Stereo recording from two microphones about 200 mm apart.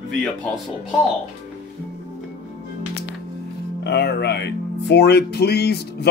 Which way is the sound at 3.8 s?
55° left (ahead or behind).